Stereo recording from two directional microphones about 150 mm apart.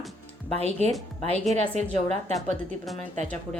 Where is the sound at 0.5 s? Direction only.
45° right (ahead or behind).